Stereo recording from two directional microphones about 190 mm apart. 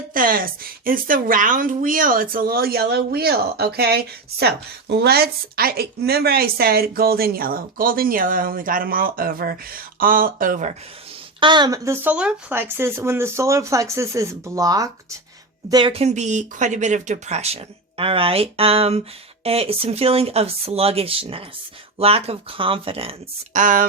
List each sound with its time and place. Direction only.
0.1 s a woman's voice: 50° right (ahead or behind)
11.3 s speech: 25° right (ahead or behind)
23.6 s a woman's voice: 45° right (ahead or behind)